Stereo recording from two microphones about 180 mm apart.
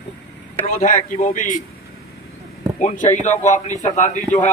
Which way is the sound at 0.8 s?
40° left (ahead or behind).